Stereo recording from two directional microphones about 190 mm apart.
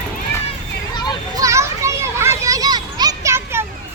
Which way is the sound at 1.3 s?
15° right (ahead or behind).